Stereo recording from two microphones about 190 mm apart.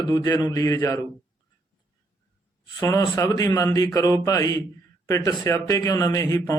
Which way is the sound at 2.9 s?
15° left (ahead or behind).